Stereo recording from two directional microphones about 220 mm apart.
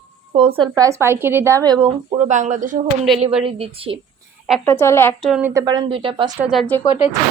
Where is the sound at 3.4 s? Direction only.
25° right (ahead or behind).